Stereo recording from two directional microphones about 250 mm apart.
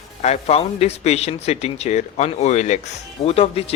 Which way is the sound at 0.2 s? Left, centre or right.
Left.